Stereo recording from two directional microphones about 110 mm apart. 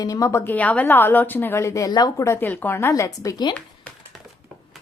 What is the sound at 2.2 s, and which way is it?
A woman's voice, 20° left (ahead or behind).